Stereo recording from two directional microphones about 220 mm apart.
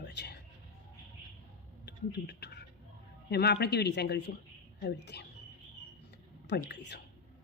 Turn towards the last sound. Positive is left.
turn(degrees=50)  # may be behind; listen again after turning